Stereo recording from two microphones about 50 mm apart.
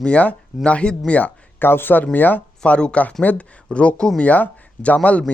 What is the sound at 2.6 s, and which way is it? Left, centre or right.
Speech, centre.